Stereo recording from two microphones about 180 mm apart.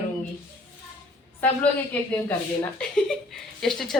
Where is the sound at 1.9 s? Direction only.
10° left (ahead or behind).